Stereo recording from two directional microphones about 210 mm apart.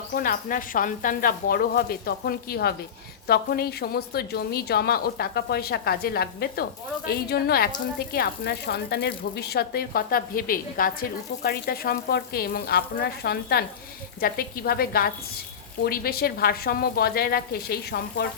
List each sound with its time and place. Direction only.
0.1 s a woman's voice: 45° left (ahead or behind)